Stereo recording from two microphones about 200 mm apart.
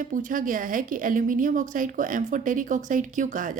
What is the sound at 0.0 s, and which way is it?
A woman's voice, 40° right (ahead or behind).